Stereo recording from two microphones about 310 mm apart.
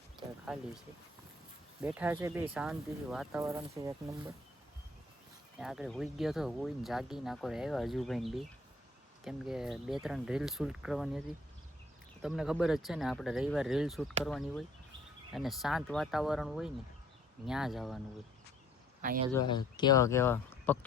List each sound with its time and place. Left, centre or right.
0.4 s speech: centre
1.8 s speech: centre
5.5 s speech: centre
19.0 s speech: right
19.3 s speech: centre